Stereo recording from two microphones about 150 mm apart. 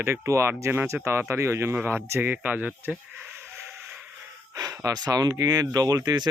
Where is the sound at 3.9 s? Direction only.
5° right (ahead or behind).